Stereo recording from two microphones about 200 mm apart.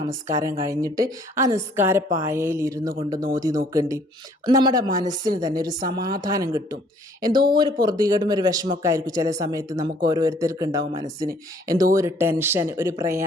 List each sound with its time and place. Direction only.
0.0 s a woman's voice: 15° right (ahead or behind)